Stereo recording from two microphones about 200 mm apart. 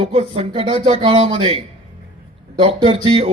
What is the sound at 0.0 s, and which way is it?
Speech, 30° right (ahead or behind).